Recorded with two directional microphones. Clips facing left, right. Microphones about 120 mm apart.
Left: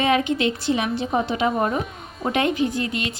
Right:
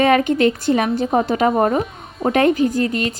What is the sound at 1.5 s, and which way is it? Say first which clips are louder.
Speech: right 6 dB; 35° right (ahead or behind).